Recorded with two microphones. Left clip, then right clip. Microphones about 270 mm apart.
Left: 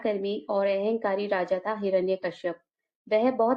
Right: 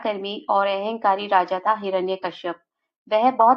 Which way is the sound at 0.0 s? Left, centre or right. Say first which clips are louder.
Right 2 dB; left.